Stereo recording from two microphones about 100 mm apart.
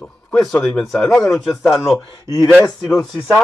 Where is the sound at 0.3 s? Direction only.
10° left (ahead or behind).